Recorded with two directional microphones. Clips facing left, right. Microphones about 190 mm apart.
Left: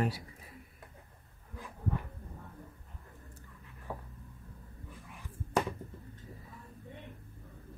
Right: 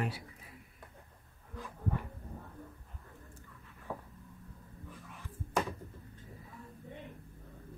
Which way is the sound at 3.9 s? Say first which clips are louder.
Even; 5° left (ahead or behind).